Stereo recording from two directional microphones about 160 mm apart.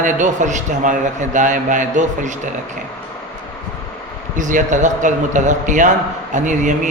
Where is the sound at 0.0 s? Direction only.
50° right (ahead or behind).